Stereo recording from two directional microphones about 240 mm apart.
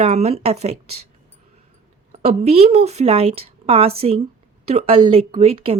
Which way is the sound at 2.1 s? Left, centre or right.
Right.